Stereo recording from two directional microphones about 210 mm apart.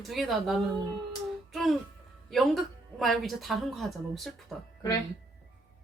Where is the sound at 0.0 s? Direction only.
Centre (ahead or behind).